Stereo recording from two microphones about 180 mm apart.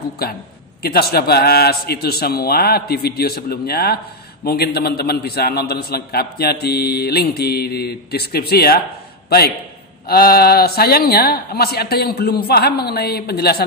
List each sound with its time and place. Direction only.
0.2 s a man's voice: 60° left (ahead or behind)
10.0 s a man's voice: 55° left (ahead or behind)